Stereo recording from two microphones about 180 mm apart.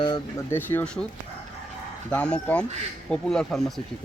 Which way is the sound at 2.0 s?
5° left (ahead or behind).